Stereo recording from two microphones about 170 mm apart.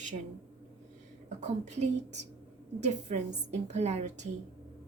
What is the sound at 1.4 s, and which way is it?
A woman's voice, 40° right (ahead or behind).